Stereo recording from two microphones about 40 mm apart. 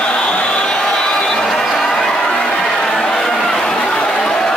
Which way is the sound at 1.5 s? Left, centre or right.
Centre.